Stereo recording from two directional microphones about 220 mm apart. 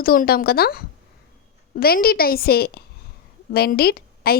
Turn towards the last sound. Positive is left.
turn(degrees=45)  # may be behind; listen again after turning